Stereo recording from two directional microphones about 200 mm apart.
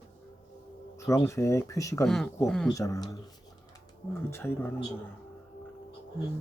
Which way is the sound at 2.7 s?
15° left (ahead or behind).